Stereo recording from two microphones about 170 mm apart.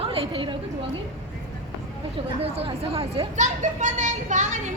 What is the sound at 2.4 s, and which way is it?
Speech, 35° right (ahead or behind).